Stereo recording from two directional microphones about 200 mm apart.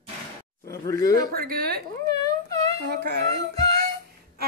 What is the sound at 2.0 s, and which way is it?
Whimper, 15° left (ahead or behind).